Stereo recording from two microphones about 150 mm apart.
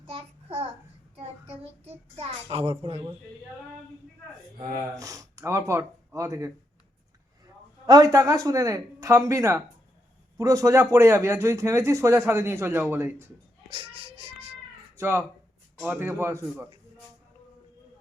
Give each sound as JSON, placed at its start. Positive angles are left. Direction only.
{"t": 0.1, "sound": "a sound", "side_deg": -40}
{"t": 1.1, "sound": "child singing", "side_deg": -45}
{"t": 4.9, "sound": "speech", "side_deg": -20}
{"t": 7.9, "sound": "a man's voice", "side_deg": -25}
{"t": 13.7, "sound": "speech", "side_deg": -40}
{"t": 14.9, "sound": "a man's voice", "side_deg": -15}